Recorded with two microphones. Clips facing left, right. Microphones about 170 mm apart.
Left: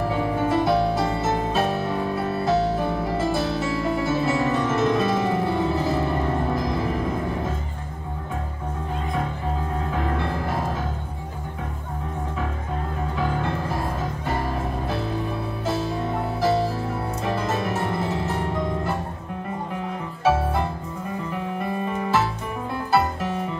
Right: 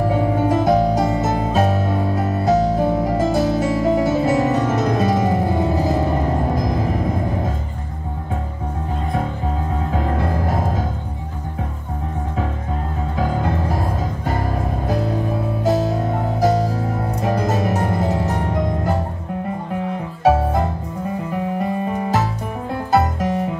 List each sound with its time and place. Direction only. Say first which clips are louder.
0.0 s music: right 5 dB; 40° right (ahead or behind)
10.1 s music: right 4 dB; 45° right (ahead or behind)
13.2 s music: right 4 dB; 45° right (ahead or behind)
14.9 s music: right 5 dB; 40° right (ahead or behind)
20.2 s music: right 5 dB; 40° right (ahead or behind)
21.8 s music: right 3 dB; 35° right (ahead or behind)